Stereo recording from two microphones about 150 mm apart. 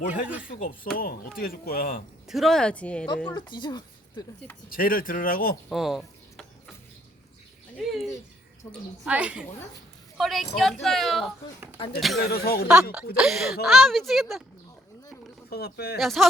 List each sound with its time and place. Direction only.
0.1 s a woman's voice: 10° right (ahead or behind)
0.4 s speech: 70° left (ahead or behind)
2.2 s speech: centre (ahead or behind)
3.3 s speech: 30° left (ahead or behind)
4.7 s speech: 70° left (ahead or behind)
5.6 s speech: centre (ahead or behind)
7.8 s bird: centre (ahead or behind)
9.0 s a woman's voice: 10° right (ahead or behind)
12.2 s speech: 90° left
13.1 s speech: 5° right (ahead or behind)
15.4 s speech: 90° left
16.0 s speech: centre (ahead or behind)